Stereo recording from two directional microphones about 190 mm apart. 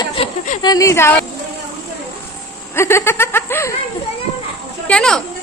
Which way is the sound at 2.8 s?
15° left (ahead or behind).